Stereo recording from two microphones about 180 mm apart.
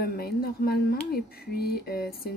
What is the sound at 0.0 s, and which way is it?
Speech, 60° left (ahead or behind).